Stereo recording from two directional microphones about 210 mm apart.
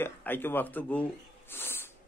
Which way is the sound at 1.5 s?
10° left (ahead or behind).